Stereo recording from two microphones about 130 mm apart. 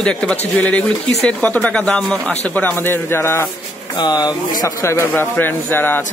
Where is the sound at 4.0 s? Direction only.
30° left (ahead or behind).